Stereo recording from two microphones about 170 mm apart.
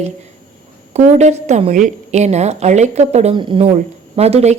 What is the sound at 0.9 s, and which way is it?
A woman's voice, 40° right (ahead or behind).